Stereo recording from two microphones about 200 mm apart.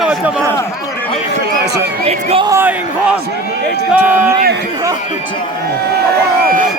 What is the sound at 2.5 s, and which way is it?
Speech, 10° right (ahead or behind).